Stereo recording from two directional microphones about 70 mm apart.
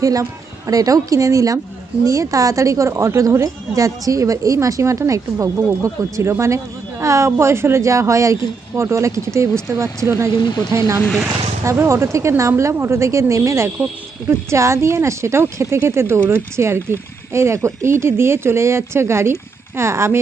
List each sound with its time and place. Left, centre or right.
0.0 s a woman's voice: right